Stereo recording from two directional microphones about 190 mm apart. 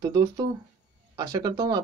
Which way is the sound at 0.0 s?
20° right (ahead or behind).